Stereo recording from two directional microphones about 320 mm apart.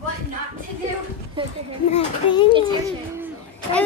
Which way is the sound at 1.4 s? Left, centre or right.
Centre.